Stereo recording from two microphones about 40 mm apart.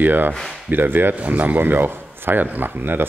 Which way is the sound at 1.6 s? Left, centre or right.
Right.